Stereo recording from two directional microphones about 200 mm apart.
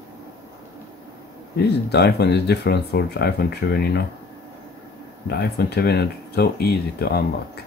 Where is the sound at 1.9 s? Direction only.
55° left (ahead or behind).